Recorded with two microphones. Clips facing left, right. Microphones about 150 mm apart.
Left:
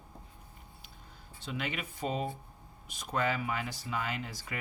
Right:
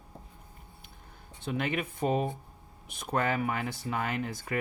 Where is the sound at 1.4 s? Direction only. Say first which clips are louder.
Right 6 dB; 50° right (ahead or behind).